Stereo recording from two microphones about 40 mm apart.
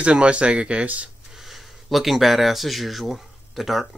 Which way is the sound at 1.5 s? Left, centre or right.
Centre.